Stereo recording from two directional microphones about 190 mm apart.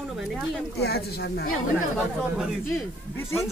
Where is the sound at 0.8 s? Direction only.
60° left (ahead or behind).